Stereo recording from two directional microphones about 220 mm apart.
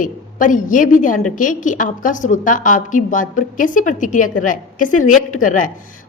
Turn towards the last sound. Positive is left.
turn(degrees=35)  # may be behind; listen again after turning